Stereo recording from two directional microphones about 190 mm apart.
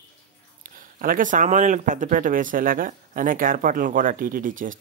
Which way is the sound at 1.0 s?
45° right (ahead or behind).